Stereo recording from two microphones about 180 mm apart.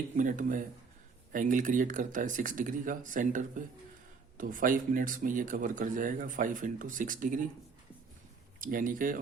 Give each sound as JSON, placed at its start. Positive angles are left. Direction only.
{"t": 0.2, "sound": "speech", "side_deg": -45}
{"t": 8.6, "sound": "speech", "side_deg": -50}